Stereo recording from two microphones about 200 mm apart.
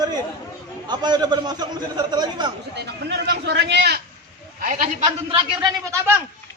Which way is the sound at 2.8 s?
55° right (ahead or behind).